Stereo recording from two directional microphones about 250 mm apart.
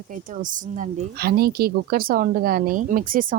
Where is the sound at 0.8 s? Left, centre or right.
Right.